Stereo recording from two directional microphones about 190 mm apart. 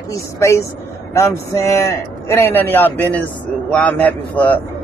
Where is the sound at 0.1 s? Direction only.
15° left (ahead or behind).